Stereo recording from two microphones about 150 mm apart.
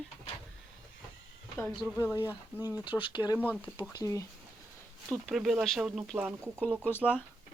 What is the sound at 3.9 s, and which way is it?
Speech, 20° left (ahead or behind).